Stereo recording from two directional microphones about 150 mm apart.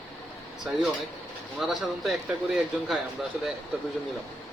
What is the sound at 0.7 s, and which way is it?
Speech, centre (ahead or behind).